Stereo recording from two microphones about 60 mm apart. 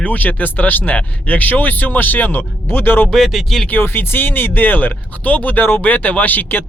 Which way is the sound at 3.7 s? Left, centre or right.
Left.